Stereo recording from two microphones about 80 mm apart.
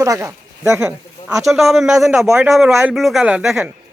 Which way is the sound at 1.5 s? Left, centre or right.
Centre.